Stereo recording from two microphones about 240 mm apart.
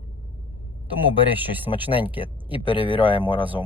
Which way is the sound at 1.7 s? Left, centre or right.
Left.